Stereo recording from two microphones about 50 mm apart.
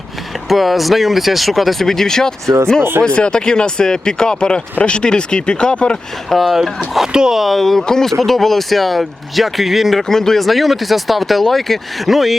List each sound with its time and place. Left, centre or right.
0.4 s speech: centre
6.3 s speech: centre
10.0 s speech: centre